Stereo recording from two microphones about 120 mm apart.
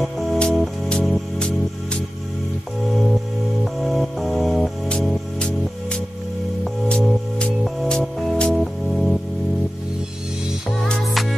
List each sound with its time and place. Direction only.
0.0 s music: centre (ahead or behind)
10.9 s music: centre (ahead or behind)